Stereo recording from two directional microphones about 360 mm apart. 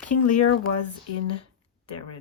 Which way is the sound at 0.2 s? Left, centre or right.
Left.